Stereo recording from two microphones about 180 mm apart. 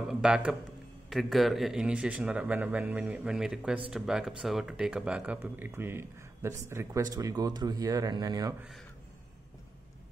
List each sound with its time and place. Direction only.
0.1 s a man's voice: 5° right (ahead or behind); by 8.5 s 20° right (ahead or behind)